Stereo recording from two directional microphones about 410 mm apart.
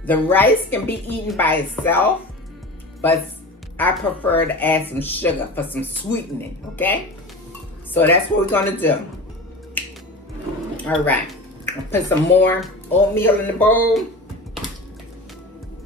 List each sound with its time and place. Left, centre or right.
0.0 s speech: centre
7.9 s speech: centre
9.8 s finger snapping: centre
10.8 s a woman's voice: centre